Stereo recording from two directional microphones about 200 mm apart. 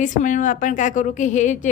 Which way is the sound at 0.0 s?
40° left (ahead or behind).